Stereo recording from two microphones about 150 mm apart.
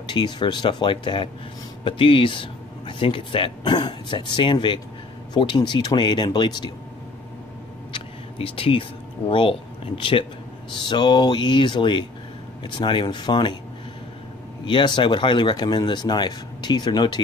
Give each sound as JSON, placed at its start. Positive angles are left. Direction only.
{"t": 0.0, "sound": "speech", "side_deg": 30}
{"t": 7.9, "sound": "a sound", "side_deg": 40}
{"t": 9.3, "sound": "speech", "side_deg": 35}
{"t": 14.7, "sound": "speech", "side_deg": 35}